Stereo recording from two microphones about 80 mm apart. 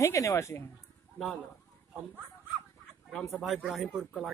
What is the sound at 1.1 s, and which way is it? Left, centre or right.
Speech, centre.